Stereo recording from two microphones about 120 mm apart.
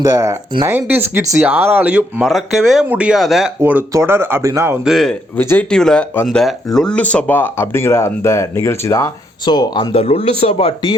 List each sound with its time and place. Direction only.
0.0 s speech: 30° right (ahead or behind)
0.7 s speech: 15° right (ahead or behind)
2.2 s speech: centre (ahead or behind)
3.6 s speech: 15° right (ahead or behind)
4.8 s speech: centre (ahead or behind)
5.4 s speech: 15° left (ahead or behind)
5.7 s speech: 5° left (ahead or behind); by 9.9 s 35° left (ahead or behind)
9.9 s speech: 55° left (ahead or behind)